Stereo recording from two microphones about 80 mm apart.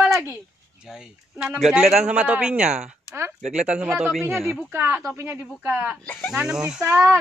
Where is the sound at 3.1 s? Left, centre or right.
Right.